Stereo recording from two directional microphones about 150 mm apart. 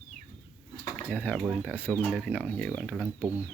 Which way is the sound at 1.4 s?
5° right (ahead or behind).